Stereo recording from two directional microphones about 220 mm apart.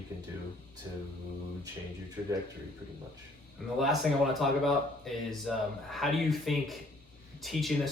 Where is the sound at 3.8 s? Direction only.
Centre (ahead or behind).